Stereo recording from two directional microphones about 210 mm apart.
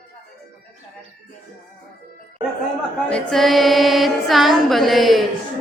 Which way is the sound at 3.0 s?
5° left (ahead or behind).